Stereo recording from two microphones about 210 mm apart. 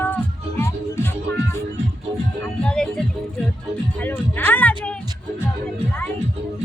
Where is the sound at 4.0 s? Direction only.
10° left (ahead or behind).